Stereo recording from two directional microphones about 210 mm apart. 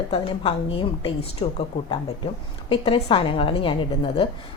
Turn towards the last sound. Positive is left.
turn(degrees=25)  # may be behind; listen again after turning